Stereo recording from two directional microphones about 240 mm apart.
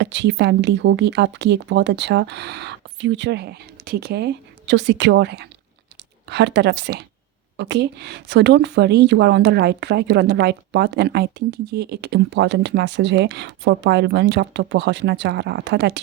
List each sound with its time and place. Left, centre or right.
0.0 s speech: right